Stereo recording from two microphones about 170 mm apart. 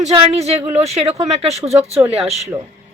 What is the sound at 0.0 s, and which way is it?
Speech, 40° right (ahead or behind).